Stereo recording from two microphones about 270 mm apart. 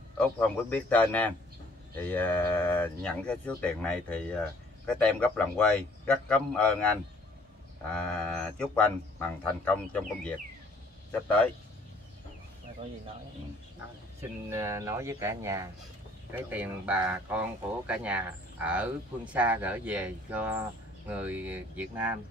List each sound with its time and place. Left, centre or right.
0.2 s speech: centre
14.2 s speech: centre